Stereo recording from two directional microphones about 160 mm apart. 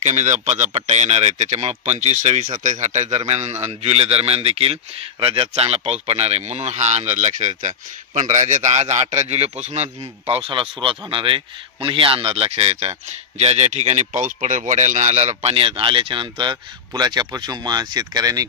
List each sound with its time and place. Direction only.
0.0 s speech: 50° right (ahead or behind); by 18.5 s 25° right (ahead or behind)